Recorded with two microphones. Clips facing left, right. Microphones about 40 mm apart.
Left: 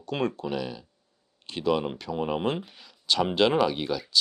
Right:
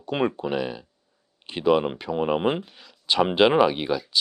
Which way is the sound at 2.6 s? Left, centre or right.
Centre.